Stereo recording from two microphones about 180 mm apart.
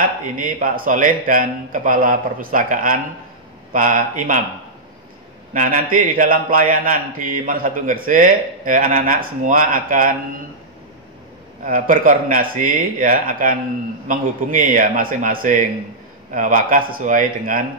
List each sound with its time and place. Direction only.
0.0 s a man's voice: 50° right (ahead or behind)
5.5 s a man's voice: 50° right (ahead or behind)
11.6 s a man's voice: 50° right (ahead or behind)